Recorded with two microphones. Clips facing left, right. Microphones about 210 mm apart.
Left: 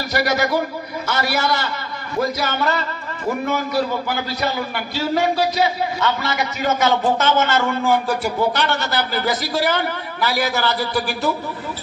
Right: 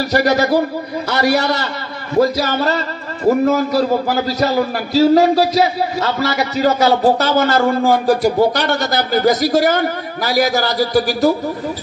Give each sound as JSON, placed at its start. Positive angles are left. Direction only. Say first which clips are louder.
{"t": 0.0, "sound": "a man's voice", "louder": "right 5 dB", "side_deg": -35}